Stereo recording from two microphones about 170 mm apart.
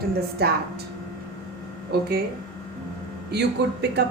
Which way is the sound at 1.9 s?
65° right (ahead or behind).